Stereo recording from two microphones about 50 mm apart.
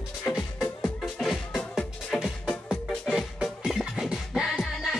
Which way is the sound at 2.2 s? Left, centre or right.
Centre.